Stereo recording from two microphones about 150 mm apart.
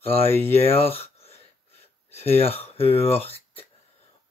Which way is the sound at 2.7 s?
40° left (ahead or behind).